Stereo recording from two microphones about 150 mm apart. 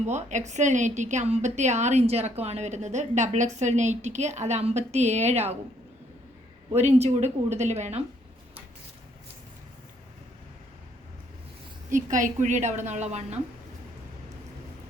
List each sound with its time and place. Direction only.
0.0 s a woman's voice: 50° right (ahead or behind)
6.7 s a woman's voice: 45° right (ahead or behind)
11.9 s a woman's voice: 60° right (ahead or behind)